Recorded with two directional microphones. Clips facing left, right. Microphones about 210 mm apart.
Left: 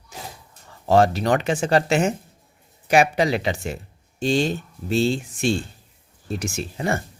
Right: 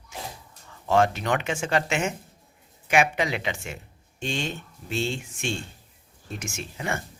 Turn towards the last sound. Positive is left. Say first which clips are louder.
# left 7 dB
turn(degrees=35)  # may be behind; listen again after turning